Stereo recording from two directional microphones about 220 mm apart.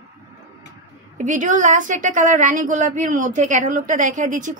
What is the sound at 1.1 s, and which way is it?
A woman's voice, 35° right (ahead or behind).